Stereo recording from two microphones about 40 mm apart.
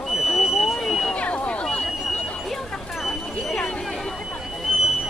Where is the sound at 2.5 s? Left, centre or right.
Centre.